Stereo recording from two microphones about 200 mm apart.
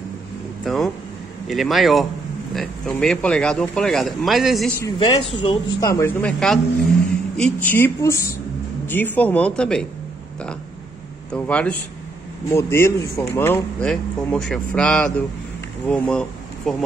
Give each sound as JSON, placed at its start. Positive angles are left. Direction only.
{"t": 0.7, "sound": "speech", "side_deg": 0}
{"t": 4.8, "sound": "a man's voice", "side_deg": 20}
{"t": 11.3, "sound": "a man's voice", "side_deg": 5}